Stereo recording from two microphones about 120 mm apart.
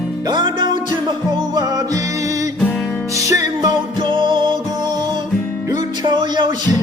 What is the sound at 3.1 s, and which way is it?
Music, 30° right (ahead or behind).